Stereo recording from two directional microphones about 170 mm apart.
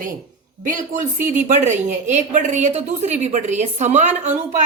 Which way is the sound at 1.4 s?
45° right (ahead or behind).